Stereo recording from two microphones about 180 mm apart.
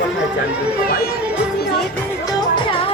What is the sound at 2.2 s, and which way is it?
Music, 25° left (ahead or behind).